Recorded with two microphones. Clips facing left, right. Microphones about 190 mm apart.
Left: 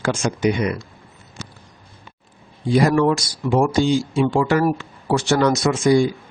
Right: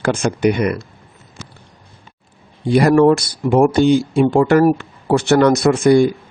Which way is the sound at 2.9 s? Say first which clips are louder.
Right 6 dB; 50° right (ahead or behind).